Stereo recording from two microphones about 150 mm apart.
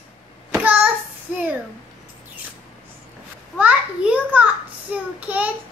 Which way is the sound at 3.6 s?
10° right (ahead or behind).